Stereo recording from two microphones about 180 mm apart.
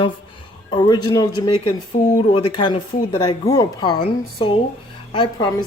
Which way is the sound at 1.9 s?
45° left (ahead or behind).